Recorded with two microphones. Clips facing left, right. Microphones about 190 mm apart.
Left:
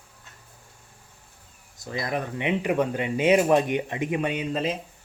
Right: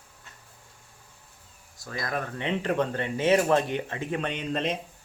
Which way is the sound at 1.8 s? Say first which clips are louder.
Left 3 dB; 20° left (ahead or behind).